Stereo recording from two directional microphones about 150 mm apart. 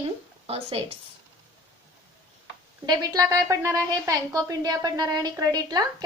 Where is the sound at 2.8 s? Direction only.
25° right (ahead or behind).